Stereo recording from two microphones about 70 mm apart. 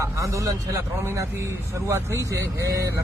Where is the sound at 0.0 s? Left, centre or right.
Right.